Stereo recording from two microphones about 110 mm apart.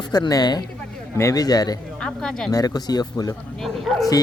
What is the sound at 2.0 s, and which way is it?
Speech, 5° left (ahead or behind).